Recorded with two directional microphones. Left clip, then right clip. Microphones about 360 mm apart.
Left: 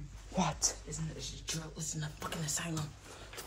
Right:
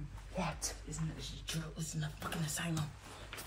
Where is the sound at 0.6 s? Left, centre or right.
Left.